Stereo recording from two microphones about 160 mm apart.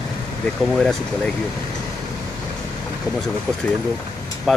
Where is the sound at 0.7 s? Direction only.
5° left (ahead or behind).